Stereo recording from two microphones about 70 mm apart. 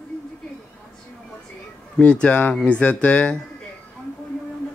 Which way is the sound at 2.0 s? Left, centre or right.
Centre.